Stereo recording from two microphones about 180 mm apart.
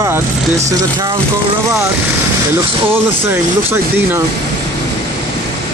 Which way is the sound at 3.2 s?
10° right (ahead or behind).